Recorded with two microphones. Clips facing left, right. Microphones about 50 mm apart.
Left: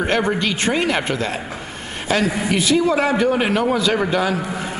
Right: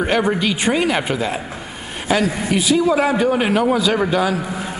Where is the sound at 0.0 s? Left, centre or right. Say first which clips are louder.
Right 1 dB; centre.